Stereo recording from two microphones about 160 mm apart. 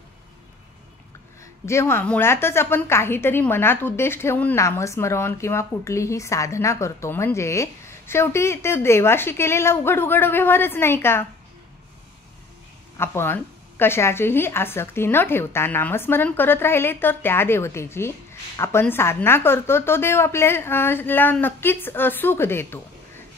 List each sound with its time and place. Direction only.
1.4 s a woman's voice: 15° left (ahead or behind)
12.9 s a woman's voice: 15° left (ahead or behind)